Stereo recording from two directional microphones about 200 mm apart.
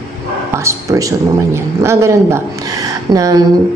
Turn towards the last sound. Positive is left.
turn(degrees=-15)  # may be behind; listen again after turning